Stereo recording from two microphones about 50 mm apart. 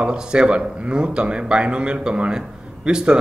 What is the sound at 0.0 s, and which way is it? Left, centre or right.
A man's voice, centre.